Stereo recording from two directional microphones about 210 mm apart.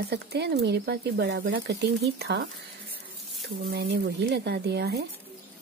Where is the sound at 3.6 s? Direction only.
50° right (ahead or behind).